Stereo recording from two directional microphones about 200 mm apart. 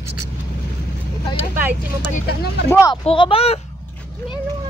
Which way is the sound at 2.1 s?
50° left (ahead or behind).